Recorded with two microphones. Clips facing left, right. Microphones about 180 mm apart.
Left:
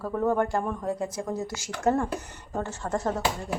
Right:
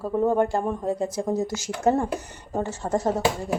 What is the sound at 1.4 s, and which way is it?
Speech, 40° right (ahead or behind).